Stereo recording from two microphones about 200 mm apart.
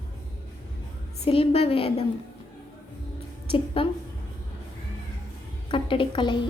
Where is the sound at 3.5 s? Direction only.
25° left (ahead or behind).